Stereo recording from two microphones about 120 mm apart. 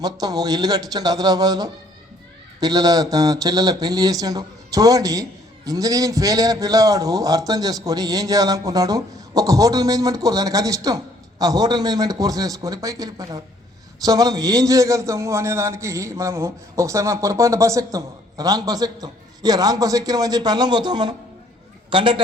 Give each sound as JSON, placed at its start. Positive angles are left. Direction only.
{"t": 0.0, "sound": "a man's voice", "side_deg": -30}